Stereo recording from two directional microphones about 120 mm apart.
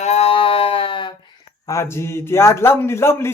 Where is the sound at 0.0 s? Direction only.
65° left (ahead or behind); by 1.1 s 45° left (ahead or behind).